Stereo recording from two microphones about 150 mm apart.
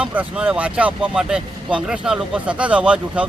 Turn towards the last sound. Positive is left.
turn(degrees=-10)  # may be behind; listen again after turning